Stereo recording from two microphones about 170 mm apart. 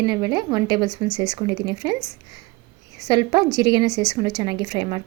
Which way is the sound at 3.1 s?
25° right (ahead or behind).